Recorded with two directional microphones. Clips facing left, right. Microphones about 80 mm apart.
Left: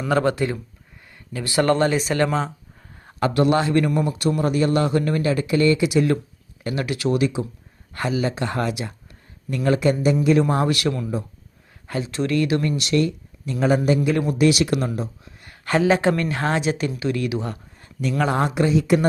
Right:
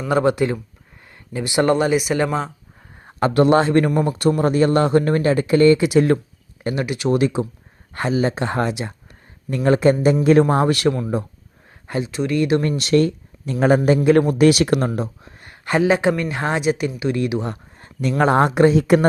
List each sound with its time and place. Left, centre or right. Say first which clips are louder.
0.1 s speech: right 3 dB; centre
3.0 s speech: right 3 dB; right
7.1 s speech: right 4 dB; right; by 16.9 s centre
17.0 s speech: right 3 dB; right
17.7 s speech: right 4 dB; right